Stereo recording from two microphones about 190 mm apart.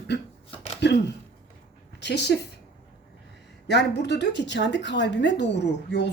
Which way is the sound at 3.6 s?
65° left (ahead or behind).